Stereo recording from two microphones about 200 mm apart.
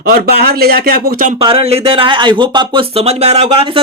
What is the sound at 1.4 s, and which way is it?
Speech, 30° right (ahead or behind).